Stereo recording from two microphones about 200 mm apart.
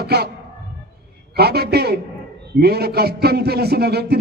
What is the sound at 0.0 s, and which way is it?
Music, 55° right (ahead or behind).